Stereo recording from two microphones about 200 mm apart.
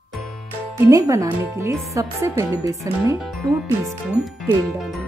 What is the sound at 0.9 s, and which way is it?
Speech, 15° right (ahead or behind).